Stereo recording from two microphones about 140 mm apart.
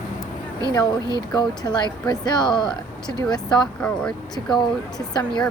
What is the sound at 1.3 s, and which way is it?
Speech, 30° left (ahead or behind).